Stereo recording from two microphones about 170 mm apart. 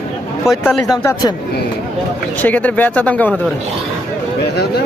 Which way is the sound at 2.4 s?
10° left (ahead or behind).